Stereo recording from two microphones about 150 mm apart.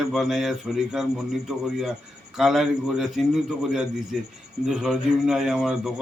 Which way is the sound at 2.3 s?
Centre (ahead or behind).